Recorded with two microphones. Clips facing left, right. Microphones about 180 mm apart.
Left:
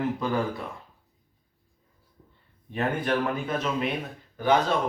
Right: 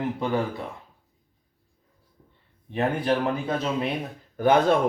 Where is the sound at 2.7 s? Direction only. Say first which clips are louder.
Right 3 dB; 30° right (ahead or behind).